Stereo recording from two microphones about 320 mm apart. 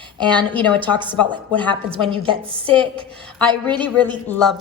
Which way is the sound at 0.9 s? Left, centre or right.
Centre.